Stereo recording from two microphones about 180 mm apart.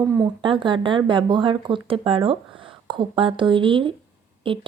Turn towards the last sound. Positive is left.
turn(degrees=-30)  # may be behind; listen again after turning